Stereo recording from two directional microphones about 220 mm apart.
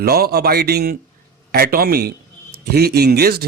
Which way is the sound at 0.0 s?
45° right (ahead or behind).